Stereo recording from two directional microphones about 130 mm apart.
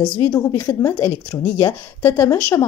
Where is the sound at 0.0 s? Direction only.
35° left (ahead or behind).